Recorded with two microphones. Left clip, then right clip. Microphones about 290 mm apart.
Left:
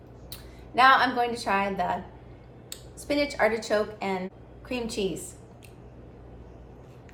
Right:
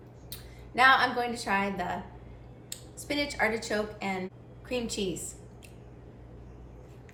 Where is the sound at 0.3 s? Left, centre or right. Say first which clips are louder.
Left 2 dB; centre.